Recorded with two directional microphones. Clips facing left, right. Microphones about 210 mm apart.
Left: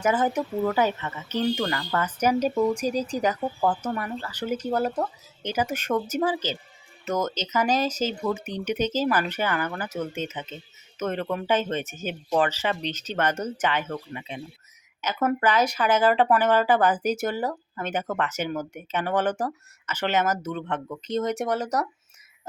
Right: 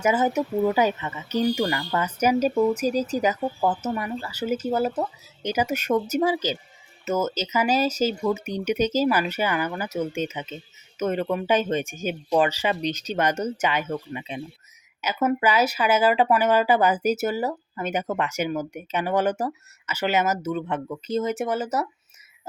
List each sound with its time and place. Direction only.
0.0 s speech: 10° right (ahead or behind)
15.0 s speech: 5° right (ahead or behind)